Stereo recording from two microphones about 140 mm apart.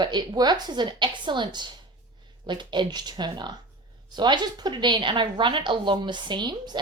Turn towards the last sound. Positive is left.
turn(degrees=-30)  # may be behind; listen again after turning